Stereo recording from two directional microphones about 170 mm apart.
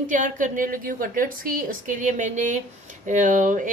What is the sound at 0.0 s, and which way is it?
A woman's voice, 50° right (ahead or behind).